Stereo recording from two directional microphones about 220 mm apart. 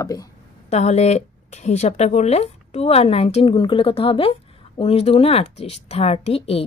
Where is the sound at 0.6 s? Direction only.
30° left (ahead or behind).